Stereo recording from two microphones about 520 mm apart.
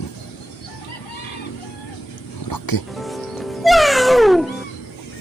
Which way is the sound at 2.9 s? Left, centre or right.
Centre.